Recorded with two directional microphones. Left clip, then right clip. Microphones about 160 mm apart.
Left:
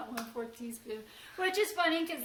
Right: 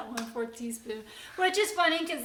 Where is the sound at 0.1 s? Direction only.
20° right (ahead or behind).